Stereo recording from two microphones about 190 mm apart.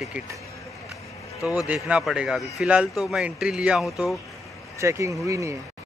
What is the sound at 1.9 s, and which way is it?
Speech, 5° right (ahead or behind).